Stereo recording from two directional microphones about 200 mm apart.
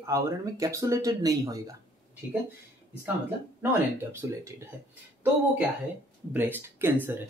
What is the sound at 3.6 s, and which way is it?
Speech, 10° right (ahead or behind).